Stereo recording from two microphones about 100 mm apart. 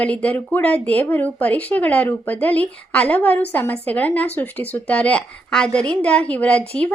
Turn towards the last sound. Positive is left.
turn(degrees=15)  # may be behind; listen again after turning